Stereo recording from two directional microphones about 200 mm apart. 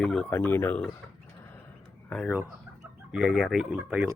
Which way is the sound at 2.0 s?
Centre (ahead or behind).